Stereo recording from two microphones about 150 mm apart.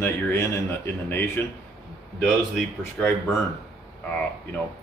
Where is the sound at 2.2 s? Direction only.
5° left (ahead or behind).